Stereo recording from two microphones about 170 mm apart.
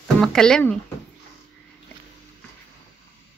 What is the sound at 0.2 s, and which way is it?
Speech, 5° left (ahead or behind).